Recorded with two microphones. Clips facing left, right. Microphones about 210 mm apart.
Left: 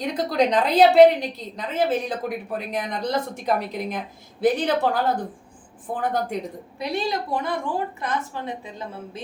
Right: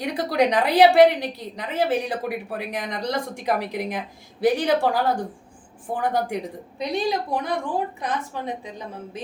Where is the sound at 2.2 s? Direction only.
70° right (ahead or behind).